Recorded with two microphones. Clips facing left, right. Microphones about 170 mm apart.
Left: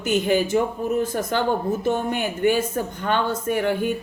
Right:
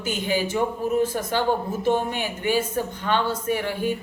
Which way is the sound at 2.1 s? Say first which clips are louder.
Left 4 dB; 50° left (ahead or behind).